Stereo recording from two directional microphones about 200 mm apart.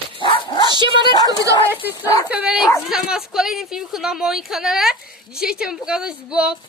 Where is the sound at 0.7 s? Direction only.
25° right (ahead or behind).